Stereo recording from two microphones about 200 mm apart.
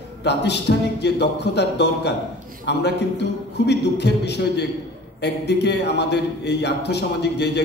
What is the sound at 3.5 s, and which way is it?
Speech, 55° left (ahead or behind).